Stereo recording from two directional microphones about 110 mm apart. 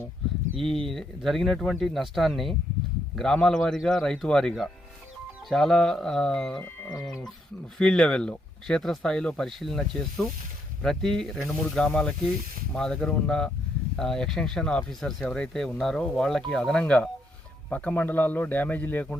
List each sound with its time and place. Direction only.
0.6 s speech: 5° left (ahead or behind)
7.8 s a man's voice: 5° left (ahead or behind)